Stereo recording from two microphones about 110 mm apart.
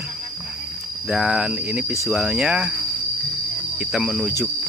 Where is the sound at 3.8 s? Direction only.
Centre (ahead or behind).